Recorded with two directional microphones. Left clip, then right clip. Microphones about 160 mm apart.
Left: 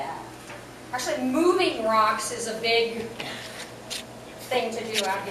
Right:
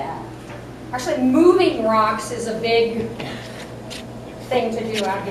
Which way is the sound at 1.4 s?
10° right (ahead or behind).